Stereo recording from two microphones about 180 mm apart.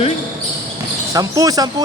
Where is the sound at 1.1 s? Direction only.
20° right (ahead or behind).